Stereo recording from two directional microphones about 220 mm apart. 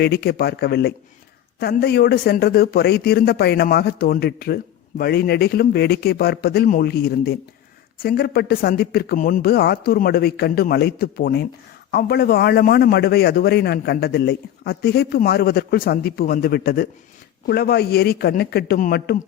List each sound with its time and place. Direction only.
0.0 s speech: 45° left (ahead or behind)